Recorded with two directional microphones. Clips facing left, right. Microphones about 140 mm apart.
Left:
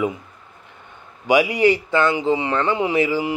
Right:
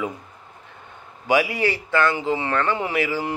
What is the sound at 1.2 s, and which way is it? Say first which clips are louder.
Speech: left 5 dB; 15° left (ahead or behind).